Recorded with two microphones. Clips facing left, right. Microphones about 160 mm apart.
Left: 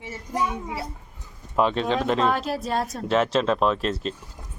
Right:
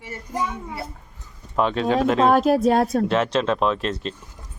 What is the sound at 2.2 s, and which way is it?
Speech, 50° right (ahead or behind).